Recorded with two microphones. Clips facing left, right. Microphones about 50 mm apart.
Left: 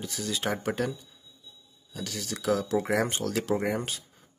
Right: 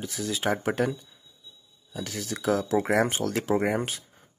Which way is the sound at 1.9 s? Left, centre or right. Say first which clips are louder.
Right 2 dB; centre.